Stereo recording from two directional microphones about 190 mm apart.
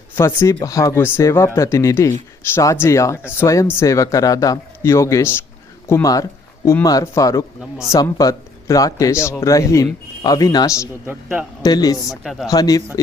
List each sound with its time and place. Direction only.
0.2 s speech: 15° left (ahead or behind)
11.0 s a man's voice: 10° right (ahead or behind)
11.6 s speech: 20° left (ahead or behind)
11.9 s speech: centre (ahead or behind)
12.5 s speech: 20° left (ahead or behind)